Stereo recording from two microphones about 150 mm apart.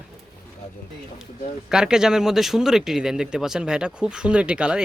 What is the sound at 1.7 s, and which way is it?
Speech, 5° right (ahead or behind).